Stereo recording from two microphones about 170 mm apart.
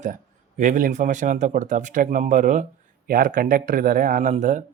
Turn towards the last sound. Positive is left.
turn(degrees=-45)  # may be behind; listen again after turning